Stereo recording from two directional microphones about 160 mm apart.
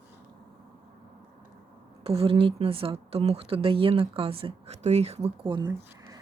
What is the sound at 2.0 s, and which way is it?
Speech, 35° right (ahead or behind).